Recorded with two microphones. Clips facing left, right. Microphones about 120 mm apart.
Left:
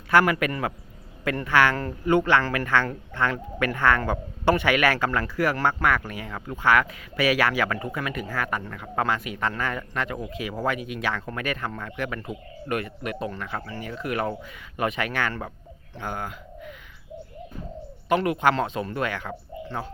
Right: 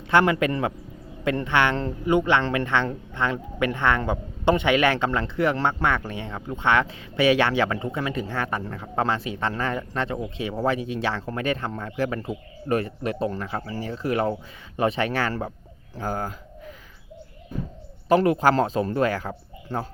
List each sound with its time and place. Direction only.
0.1 s speech: 25° right (ahead or behind)
18.1 s speech: 35° right (ahead or behind)